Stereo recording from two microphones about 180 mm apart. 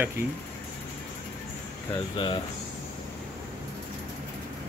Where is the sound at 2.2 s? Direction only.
30° left (ahead or behind).